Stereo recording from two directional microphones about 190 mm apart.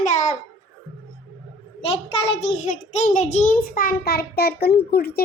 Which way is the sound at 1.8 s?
30° left (ahead or behind).